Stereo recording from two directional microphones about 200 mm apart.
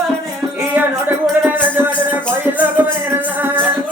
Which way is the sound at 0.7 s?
10° right (ahead or behind).